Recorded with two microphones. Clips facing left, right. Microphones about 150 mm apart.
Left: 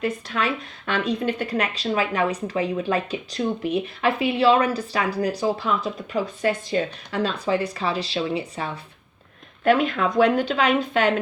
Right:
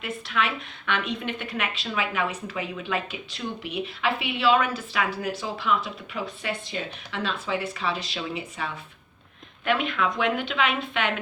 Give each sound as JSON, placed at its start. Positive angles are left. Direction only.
{"t": 0.3, "sound": "speech", "side_deg": 40}